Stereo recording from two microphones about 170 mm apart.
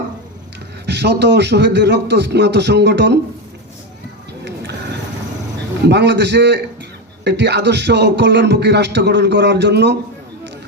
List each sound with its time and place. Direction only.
0.9 s speech: 85° right
5.9 s speech: 90° right